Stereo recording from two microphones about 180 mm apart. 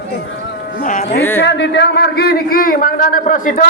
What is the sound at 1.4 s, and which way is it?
A man's voice, 75° left (ahead or behind).